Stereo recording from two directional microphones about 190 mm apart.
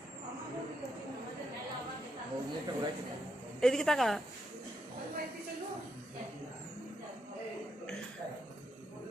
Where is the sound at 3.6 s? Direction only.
5° left (ahead or behind).